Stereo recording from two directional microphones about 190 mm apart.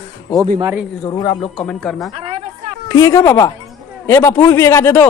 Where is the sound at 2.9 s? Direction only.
15° left (ahead or behind).